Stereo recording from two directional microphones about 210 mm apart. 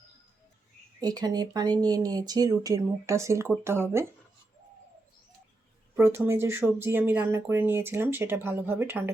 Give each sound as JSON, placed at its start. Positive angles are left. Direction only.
{"t": 1.0, "sound": "speech", "side_deg": -20}
{"t": 6.0, "sound": "speech", "side_deg": -10}